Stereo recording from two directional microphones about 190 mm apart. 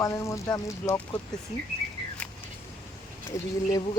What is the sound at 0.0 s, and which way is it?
Speech, 15° left (ahead or behind).